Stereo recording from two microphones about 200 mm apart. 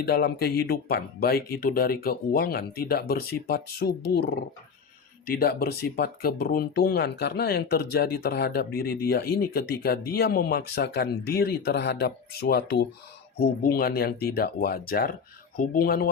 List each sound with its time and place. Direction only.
0.0 s speech: 50° left (ahead or behind)